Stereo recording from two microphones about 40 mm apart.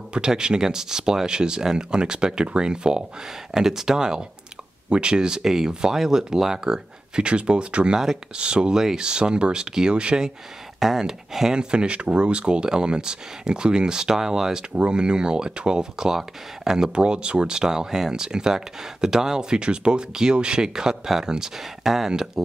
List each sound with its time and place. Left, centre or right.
0.1 s speech: centre
7.2 s speech: right
11.5 s speech: right
14.9 s speech: right